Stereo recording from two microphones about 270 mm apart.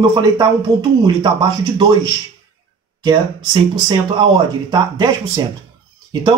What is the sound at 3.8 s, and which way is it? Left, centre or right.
Speech, centre.